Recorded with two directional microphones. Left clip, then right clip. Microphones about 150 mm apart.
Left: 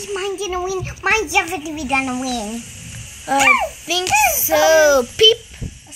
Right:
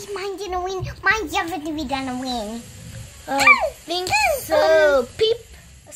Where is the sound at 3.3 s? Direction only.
35° left (ahead or behind).